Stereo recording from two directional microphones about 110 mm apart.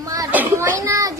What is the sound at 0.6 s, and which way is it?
Speech, 30° right (ahead or behind).